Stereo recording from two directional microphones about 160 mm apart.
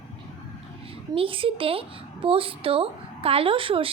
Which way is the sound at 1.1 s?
35° right (ahead or behind).